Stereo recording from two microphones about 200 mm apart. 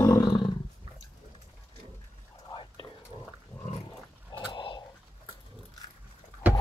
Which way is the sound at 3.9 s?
20° left (ahead or behind).